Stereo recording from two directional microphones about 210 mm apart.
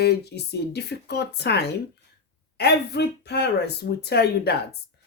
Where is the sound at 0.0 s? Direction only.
50° left (ahead or behind).